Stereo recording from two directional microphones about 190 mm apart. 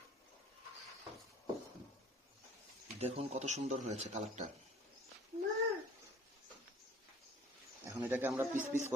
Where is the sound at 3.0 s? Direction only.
35° right (ahead or behind).